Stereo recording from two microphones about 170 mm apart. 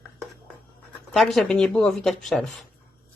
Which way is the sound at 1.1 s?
Centre (ahead or behind).